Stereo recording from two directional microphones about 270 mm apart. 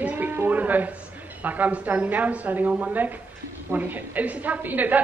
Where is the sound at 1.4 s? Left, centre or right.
Centre.